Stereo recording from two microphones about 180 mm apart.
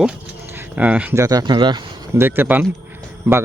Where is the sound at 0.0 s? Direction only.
10° right (ahead or behind); by 1.9 s 25° right (ahead or behind).